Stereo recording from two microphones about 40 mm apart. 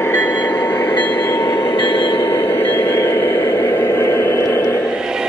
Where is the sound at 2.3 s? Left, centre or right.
Left.